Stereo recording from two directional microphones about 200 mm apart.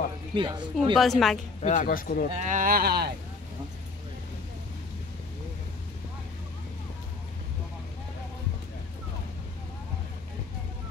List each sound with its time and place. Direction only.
0.4 s speech: 25° right (ahead or behind)
0.9 s a woman's voice: centre (ahead or behind)
1.6 s speech: 40° left (ahead or behind)
2.3 s speech: 40° right (ahead or behind)